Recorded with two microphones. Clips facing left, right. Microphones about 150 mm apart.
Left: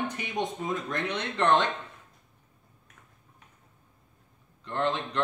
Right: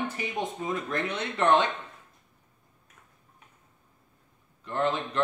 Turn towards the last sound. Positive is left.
turn(degrees=-5)  # may be behind; listen again after turning